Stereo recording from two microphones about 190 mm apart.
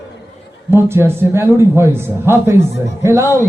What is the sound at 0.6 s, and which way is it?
Speech, 10° right (ahead or behind).